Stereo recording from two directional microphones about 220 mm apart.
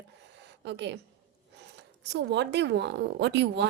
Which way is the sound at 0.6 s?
50° right (ahead or behind).